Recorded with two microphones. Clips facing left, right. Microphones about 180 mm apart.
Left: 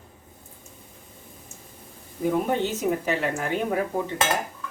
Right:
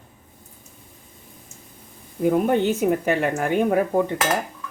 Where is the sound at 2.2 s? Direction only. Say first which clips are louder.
Right 5 dB; 55° right (ahead or behind).